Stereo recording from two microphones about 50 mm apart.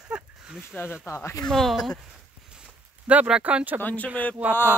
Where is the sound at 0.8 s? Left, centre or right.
Left.